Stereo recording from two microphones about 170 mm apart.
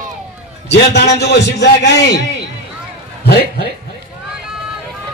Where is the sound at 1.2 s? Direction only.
75° left (ahead or behind).